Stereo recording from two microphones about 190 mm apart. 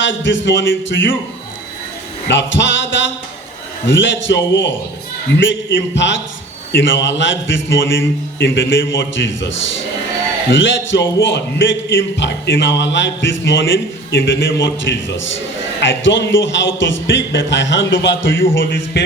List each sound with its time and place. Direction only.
0.0 s speech: 75° left (ahead or behind)
2.2 s speech: 70° left (ahead or behind)
10.5 s speech: 75° left (ahead or behind)